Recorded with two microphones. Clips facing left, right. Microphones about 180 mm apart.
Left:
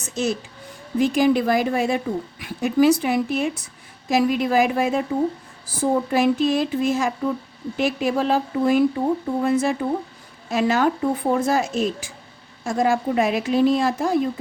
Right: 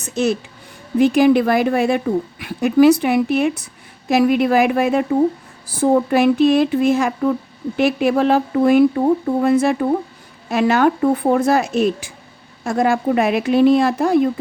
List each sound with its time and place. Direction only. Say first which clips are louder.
0.2 s speech: right 5 dB; 65° right (ahead or behind)